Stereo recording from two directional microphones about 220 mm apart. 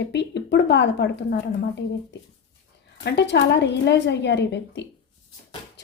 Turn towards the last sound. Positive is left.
turn(degrees=50)  # may be behind; listen again after turning